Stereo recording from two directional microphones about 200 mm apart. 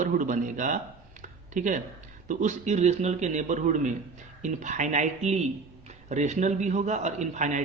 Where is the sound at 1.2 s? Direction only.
40° right (ahead or behind).